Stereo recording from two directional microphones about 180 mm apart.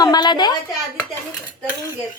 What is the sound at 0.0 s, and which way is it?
Speech, 25° left (ahead or behind).